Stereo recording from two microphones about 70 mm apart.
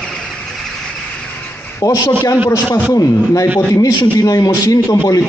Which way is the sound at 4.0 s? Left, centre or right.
Left.